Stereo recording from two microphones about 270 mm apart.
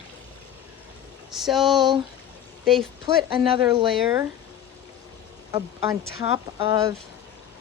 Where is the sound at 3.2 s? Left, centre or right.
Centre.